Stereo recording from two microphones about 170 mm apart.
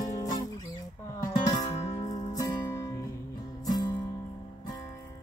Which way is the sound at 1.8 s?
40° left (ahead or behind).